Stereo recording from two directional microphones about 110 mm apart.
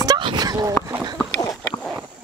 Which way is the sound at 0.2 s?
40° right (ahead or behind).